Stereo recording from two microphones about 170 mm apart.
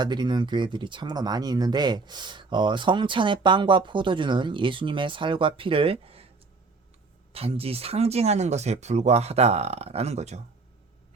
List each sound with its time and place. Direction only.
0.0 s speech: 25° right (ahead or behind)
7.3 s speech: 35° right (ahead or behind)